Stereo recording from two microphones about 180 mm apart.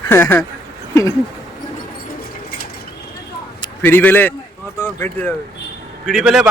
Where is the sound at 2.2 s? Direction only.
55° left (ahead or behind).